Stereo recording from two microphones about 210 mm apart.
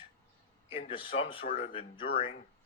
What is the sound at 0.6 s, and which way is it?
Speech, 25° left (ahead or behind).